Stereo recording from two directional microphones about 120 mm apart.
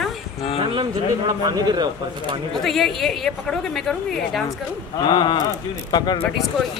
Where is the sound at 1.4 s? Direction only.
35° right (ahead or behind).